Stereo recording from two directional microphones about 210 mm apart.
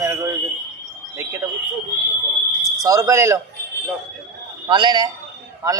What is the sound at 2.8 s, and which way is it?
Speech, 15° right (ahead or behind).